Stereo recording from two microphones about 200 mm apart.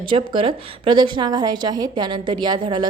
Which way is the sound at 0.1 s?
25° right (ahead or behind).